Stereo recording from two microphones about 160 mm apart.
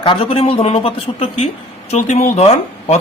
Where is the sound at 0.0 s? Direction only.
35° left (ahead or behind).